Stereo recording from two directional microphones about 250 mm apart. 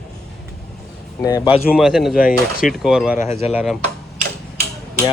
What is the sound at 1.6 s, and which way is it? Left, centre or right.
Speech, centre.